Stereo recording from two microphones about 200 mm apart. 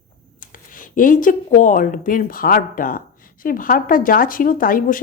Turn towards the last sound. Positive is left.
turn(degrees=45)  # may be behind; listen again after turning